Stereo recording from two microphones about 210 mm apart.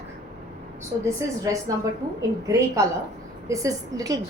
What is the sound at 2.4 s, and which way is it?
A woman's voice, 15° right (ahead or behind).